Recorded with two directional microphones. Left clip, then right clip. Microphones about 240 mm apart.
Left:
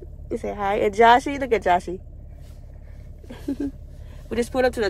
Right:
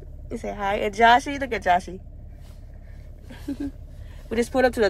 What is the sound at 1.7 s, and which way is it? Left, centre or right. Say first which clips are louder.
Speech: right 2 dB; centre.